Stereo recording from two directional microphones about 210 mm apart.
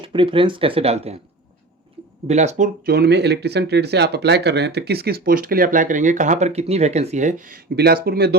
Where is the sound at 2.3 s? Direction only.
35° right (ahead or behind).